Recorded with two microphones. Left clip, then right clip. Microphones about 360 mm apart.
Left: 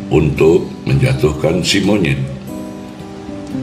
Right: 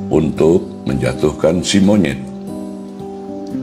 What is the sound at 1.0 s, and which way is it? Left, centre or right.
Speech, right.